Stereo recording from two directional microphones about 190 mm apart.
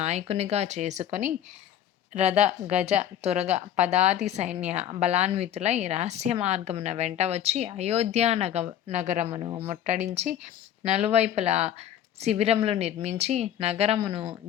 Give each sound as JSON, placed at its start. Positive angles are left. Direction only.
{"t": 0.0, "sound": "speech", "side_deg": -35}